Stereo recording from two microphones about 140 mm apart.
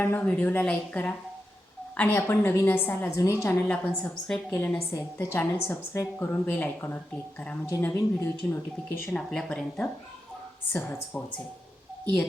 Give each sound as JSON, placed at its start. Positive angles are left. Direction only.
{"t": 0.0, "sound": "a woman's voice", "side_deg": 15}
{"t": 9.1, "sound": "speech", "side_deg": 5}